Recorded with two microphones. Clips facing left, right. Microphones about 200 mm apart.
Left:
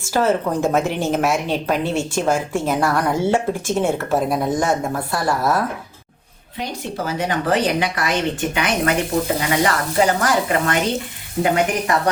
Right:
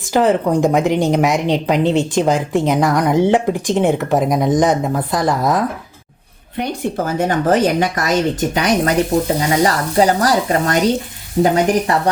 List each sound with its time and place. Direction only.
0.0 s a woman's voice: 15° right (ahead or behind)
6.6 s a woman's voice: 50° right (ahead or behind); by 12.1 s 35° right (ahead or behind)